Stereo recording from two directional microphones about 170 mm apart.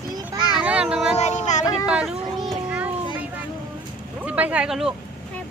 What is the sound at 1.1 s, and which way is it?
Speech, 40° left (ahead or behind).